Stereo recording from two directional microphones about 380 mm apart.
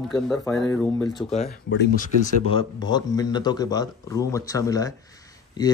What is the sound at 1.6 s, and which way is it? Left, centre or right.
Speech, left.